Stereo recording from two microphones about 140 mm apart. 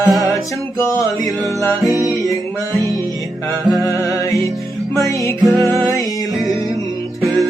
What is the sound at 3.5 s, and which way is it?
Music, 20° left (ahead or behind).